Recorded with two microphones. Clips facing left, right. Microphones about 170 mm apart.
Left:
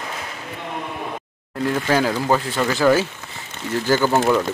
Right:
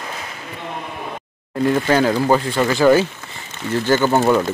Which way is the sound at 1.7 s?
5° left (ahead or behind).